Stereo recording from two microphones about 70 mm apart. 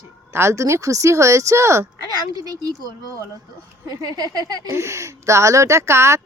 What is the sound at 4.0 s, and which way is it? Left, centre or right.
Speech, right.